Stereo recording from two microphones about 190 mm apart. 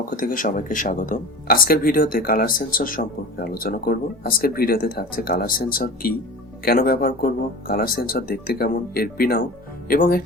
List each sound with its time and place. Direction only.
0.1 s speech: 45° left (ahead or behind)